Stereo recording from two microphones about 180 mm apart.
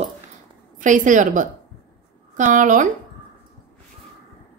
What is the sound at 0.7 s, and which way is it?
A woman's voice, 45° right (ahead or behind).